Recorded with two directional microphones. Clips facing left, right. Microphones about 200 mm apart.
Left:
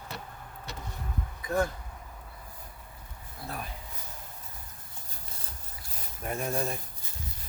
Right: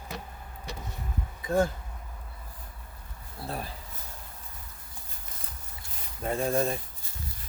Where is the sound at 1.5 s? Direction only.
25° right (ahead or behind).